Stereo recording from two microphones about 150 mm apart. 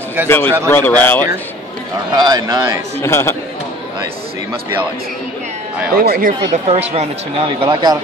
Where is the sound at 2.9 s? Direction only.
20° left (ahead or behind).